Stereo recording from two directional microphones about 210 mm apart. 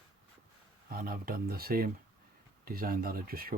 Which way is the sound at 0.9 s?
45° right (ahead or behind).